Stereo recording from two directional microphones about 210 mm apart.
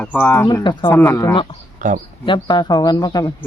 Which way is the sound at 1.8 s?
35° right (ahead or behind).